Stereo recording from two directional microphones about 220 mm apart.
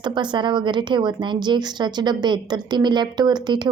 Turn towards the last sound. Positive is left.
turn(degrees=-20)  # may be behind; listen again after turning